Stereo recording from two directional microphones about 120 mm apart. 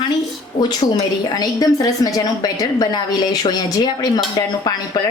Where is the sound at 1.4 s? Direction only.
30° left (ahead or behind).